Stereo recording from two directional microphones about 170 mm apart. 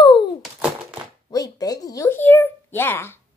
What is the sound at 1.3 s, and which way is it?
Speech, 20° left (ahead or behind).